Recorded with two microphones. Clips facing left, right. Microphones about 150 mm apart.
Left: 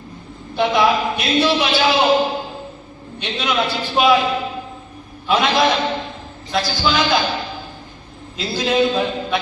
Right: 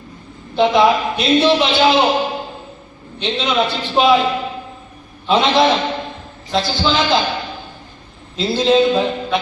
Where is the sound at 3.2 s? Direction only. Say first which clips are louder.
Right 4 dB; 25° right (ahead or behind).